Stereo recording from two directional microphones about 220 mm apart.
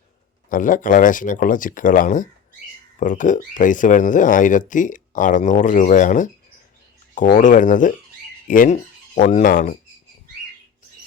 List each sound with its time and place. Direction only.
0.5 s speech: 40° left (ahead or behind)